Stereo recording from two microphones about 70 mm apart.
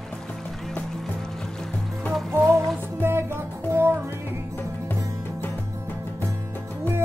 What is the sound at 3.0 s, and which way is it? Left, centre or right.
Music, right.